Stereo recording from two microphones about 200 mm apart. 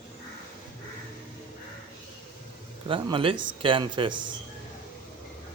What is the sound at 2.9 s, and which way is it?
A man's voice, 25° right (ahead or behind).